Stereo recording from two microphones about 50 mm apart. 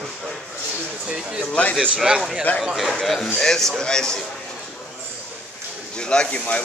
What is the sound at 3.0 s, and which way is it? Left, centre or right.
Speech, centre.